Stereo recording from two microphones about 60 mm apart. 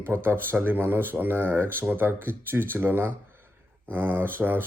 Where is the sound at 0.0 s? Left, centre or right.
Right.